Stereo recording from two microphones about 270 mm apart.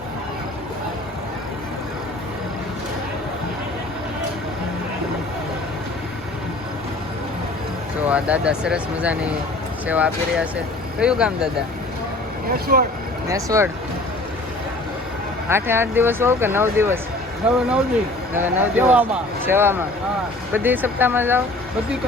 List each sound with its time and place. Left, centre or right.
8.1 s speech: centre
12.5 s speech: right
13.2 s speech: centre
15.4 s speech: centre